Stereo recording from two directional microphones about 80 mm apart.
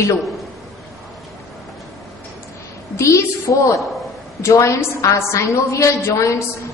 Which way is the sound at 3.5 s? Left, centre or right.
Left.